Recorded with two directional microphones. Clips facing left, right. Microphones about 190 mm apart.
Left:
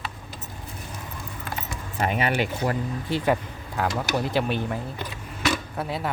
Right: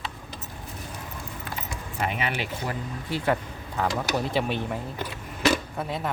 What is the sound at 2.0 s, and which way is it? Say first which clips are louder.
Speech: left 5 dB; 40° left (ahead or behind).